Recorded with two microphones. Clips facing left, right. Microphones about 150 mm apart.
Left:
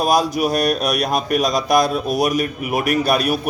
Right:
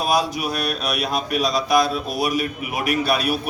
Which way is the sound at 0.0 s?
40° left (ahead or behind).